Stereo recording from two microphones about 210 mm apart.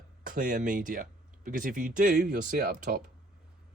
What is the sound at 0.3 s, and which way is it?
Speech, 40° right (ahead or behind).